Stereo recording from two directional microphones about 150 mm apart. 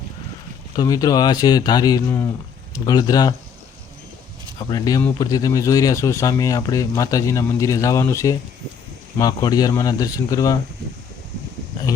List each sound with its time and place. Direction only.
0.8 s speech: 25° left (ahead or behind)
4.7 s speech: 25° left (ahead or behind)